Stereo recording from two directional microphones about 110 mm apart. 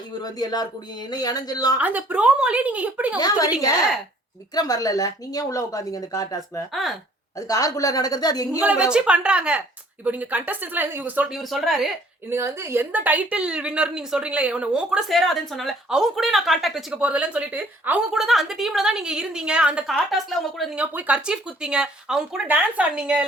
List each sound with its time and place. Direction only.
0.1 s speech: 35° left (ahead or behind)
1.8 s a woman's voice: 15° right (ahead or behind)
3.2 s speech: 35° left (ahead or behind)
4.5 s speech: 35° left (ahead or behind)
8.6 s a woman's voice: 10° right (ahead or behind)
11.3 s a woman's voice: centre (ahead or behind)
12.3 s a woman's voice: 25° right (ahead or behind)
18.1 s a woman's voice: 5° right (ahead or behind)
20.1 s a woman's voice: centre (ahead or behind)
20.7 s a woman's voice: 10° right (ahead or behind)